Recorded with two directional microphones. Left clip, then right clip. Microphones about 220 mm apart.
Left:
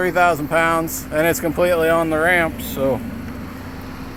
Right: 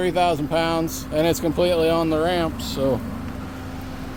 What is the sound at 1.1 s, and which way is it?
Speech, 10° right (ahead or behind).